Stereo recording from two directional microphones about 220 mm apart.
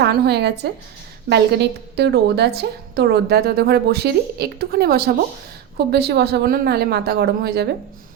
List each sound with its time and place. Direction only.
0.0 s a woman's voice: 50° right (ahead or behind)